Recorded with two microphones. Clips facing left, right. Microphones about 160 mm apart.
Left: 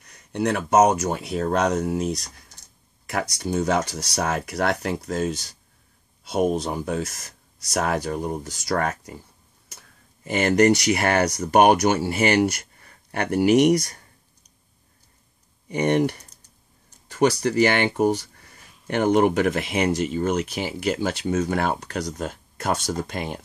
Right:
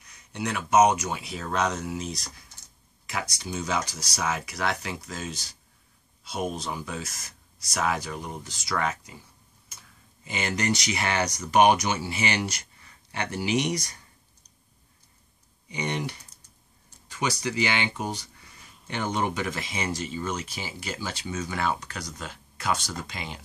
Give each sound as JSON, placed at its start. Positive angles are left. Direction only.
{"t": 0.0, "sound": "speech", "side_deg": 55}
{"t": 15.7, "sound": "speech", "side_deg": 50}